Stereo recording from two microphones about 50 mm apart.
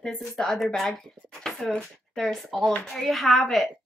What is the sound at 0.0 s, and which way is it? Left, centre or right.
Speech, centre.